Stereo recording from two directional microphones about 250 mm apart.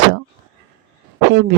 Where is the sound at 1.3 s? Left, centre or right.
Right.